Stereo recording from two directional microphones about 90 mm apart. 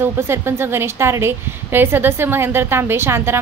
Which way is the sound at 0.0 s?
25° right (ahead or behind).